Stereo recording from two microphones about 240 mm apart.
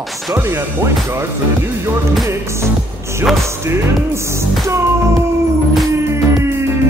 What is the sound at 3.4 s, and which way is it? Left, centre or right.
Speech, centre.